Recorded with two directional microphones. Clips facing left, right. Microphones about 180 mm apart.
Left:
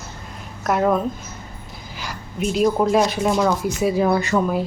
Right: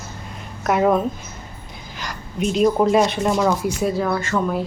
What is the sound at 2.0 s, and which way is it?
Speech, 5° left (ahead or behind).